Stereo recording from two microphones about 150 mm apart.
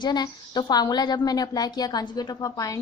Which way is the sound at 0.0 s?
30° left (ahead or behind).